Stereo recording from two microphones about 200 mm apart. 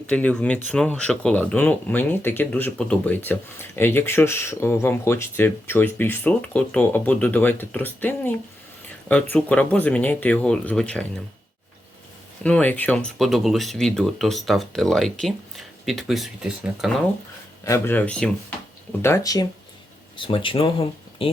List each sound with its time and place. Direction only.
0.1 s speech: 5° left (ahead or behind)
12.4 s speech: 5° left (ahead or behind)
17.7 s speech: 10° left (ahead or behind); by 21.2 s 25° left (ahead or behind)